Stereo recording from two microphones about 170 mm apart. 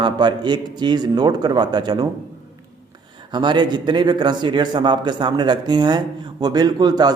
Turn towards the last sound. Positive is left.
turn(degrees=-25)  # may be behind; listen again after turning